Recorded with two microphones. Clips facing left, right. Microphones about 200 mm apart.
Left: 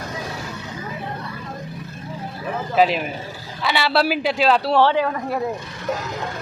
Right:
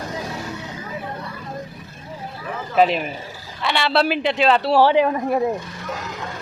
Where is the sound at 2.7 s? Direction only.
Centre (ahead or behind).